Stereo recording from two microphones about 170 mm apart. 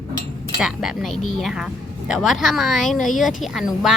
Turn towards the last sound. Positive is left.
turn(degrees=0)  # may be behind; listen again after turning